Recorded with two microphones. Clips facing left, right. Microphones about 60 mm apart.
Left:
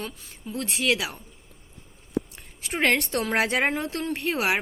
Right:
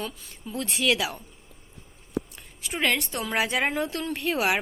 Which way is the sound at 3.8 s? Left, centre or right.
Left.